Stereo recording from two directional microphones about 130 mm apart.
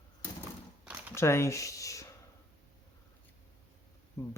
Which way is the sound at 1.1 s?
20° left (ahead or behind).